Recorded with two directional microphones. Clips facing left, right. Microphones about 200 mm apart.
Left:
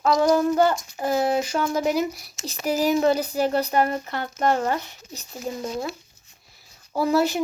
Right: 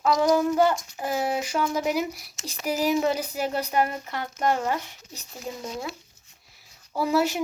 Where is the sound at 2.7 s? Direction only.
35° left (ahead or behind).